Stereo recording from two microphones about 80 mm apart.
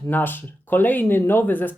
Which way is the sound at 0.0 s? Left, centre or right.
Left.